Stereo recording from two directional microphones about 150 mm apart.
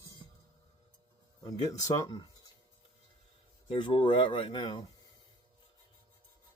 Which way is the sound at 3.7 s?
35° left (ahead or behind).